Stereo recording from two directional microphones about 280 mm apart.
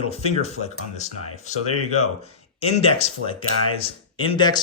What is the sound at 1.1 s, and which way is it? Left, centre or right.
Speech, left.